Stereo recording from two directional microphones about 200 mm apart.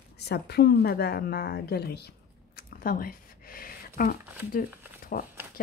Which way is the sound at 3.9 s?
45° left (ahead or behind).